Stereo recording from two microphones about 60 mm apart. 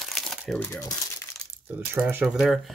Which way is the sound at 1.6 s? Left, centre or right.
Right.